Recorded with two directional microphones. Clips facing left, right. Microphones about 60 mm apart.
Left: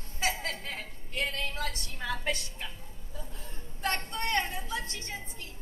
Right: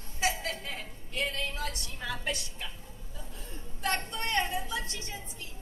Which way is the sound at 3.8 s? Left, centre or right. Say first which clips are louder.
Even; left.